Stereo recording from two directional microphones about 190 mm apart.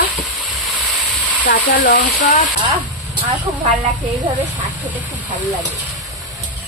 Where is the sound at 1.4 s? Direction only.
40° left (ahead or behind).